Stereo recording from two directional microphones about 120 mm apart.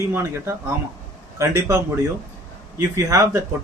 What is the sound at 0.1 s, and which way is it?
A man's voice, 20° right (ahead or behind).